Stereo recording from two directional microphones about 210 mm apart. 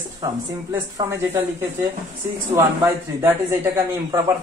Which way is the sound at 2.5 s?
10° right (ahead or behind).